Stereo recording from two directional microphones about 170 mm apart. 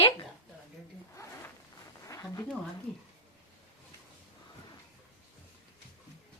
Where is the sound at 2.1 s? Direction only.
20° left (ahead or behind).